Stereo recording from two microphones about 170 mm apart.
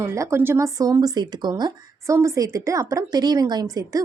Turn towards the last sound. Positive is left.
turn(degrees=-20)  # may be behind; listen again after turning